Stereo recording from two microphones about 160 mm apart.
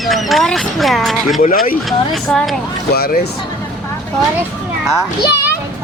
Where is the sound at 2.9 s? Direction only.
75° left (ahead or behind).